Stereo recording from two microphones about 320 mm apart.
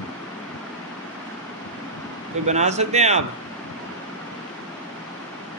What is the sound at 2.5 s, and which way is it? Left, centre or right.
Speech, right.